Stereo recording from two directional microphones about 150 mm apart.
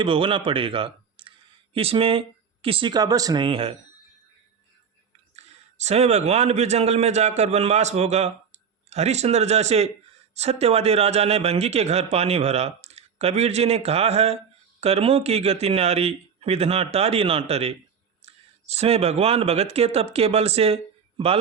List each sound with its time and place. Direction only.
0.0 s speech: 35° right (ahead or behind)
5.4 s a man's voice: 45° right (ahead or behind)